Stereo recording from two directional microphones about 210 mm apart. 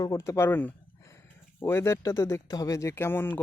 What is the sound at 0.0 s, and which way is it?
Speech, 15° left (ahead or behind).